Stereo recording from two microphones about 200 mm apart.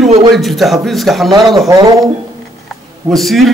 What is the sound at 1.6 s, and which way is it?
Speech, 20° right (ahead or behind).